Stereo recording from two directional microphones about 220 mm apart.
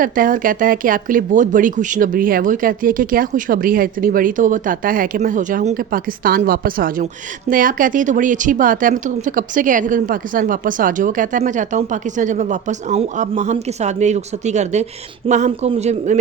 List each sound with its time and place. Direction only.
0.0 s speech: 40° right (ahead or behind)